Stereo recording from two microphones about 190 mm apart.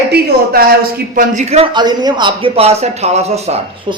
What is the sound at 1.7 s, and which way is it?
Speech, 20° right (ahead or behind).